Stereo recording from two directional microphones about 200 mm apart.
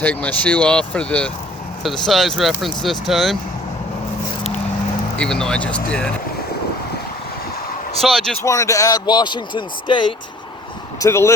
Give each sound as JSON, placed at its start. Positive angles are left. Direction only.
{"t": 0.0, "sound": "speech", "side_deg": 10}
{"t": 5.1, "sound": "speech", "side_deg": 5}
{"t": 8.0, "sound": "speech", "side_deg": 0}
{"t": 8.4, "sound": "a man's voice", "side_deg": 15}
{"t": 11.0, "sound": "speech", "side_deg": 15}